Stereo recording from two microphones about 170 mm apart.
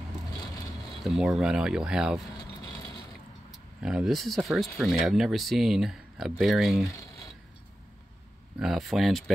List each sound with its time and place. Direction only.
1.0 s speech: centre (ahead or behind)
3.8 s speech: 5° right (ahead or behind)
8.5 s speech: centre (ahead or behind)